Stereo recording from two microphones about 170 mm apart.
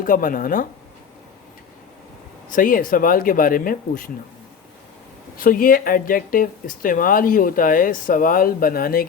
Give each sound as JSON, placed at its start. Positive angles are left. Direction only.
{"t": 0.0, "sound": "speech", "side_deg": 55}
{"t": 2.5, "sound": "speech", "side_deg": 55}
{"t": 5.4, "sound": "speech", "side_deg": 55}